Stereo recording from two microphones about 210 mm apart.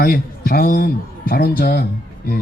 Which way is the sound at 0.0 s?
45° left (ahead or behind).